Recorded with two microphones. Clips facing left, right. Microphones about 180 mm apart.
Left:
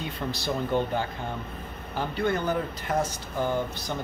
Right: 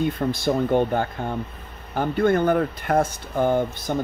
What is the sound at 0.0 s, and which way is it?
Speech, 50° right (ahead or behind).